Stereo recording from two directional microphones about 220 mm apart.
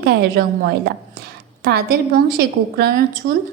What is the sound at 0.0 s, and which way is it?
A woman's voice, 45° right (ahead or behind).